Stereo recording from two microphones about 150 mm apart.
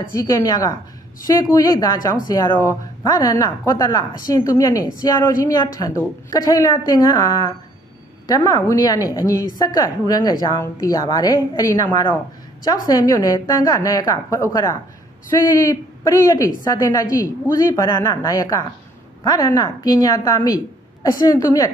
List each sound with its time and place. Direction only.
0.1 s a woman's voice: 20° left (ahead or behind)